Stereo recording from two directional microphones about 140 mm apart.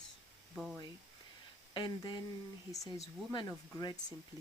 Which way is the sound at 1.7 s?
30° left (ahead or behind).